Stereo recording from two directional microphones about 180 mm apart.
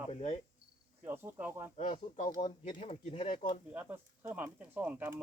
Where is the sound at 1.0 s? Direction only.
10° right (ahead or behind).